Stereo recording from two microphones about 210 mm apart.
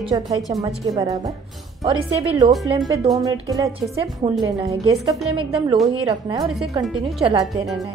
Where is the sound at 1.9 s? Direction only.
30° right (ahead or behind).